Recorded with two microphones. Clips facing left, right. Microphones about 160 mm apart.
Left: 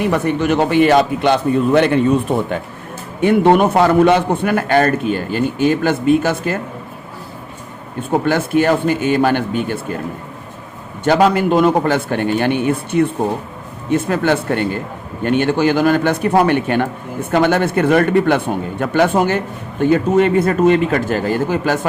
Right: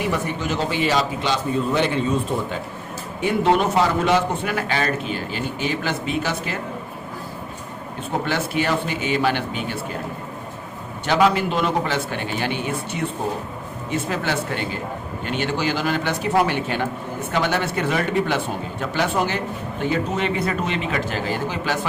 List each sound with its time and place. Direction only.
0.0 s a man's voice: 60° left (ahead or behind)
8.2 s a man's voice: 50° left (ahead or behind)
11.0 s a man's voice: 50° left (ahead or behind)